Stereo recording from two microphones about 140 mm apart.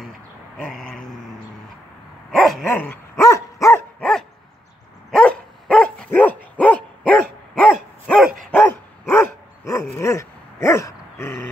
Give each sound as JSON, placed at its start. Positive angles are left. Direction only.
{"t": 0.6, "sound": "a sound", "side_deg": 0}
{"t": 2.3, "sound": "dog", "side_deg": 0}
{"t": 2.8, "sound": "dog", "side_deg": 20}
{"t": 4.0, "sound": "dog", "side_deg": 5}